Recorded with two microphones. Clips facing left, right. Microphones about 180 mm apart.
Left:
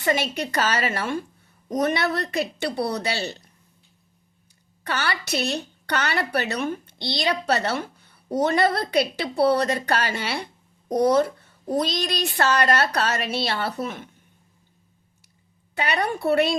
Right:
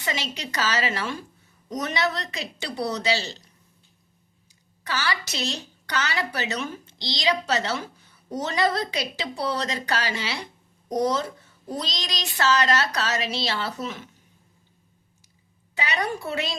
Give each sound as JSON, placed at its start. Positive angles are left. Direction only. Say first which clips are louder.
{"t": 0.0, "sound": "a woman's voice", "louder": "left 7 dB", "side_deg": 55}
{"t": 4.8, "sound": "a woman's voice", "louder": "left 1 dB", "side_deg": 60}
{"t": 15.7, "sound": "a woman's voice", "louder": "left 3 dB", "side_deg": 60}